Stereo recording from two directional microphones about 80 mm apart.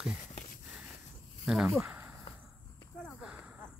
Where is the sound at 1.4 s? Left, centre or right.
Centre.